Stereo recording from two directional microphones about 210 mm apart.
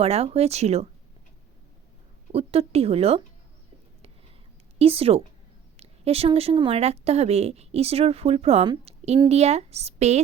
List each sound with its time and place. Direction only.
0.0 s speech: 30° right (ahead or behind)
2.3 s speech: 30° right (ahead or behind)
4.8 s speech: 25° right (ahead or behind)